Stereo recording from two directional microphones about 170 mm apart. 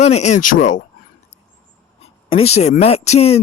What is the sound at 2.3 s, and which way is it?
Speech, 35° left (ahead or behind).